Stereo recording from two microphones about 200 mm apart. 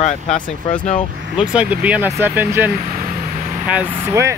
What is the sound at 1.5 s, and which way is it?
Speech, 5° right (ahead or behind).